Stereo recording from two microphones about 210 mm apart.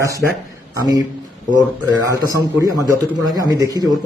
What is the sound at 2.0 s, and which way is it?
Speech, 15° right (ahead or behind).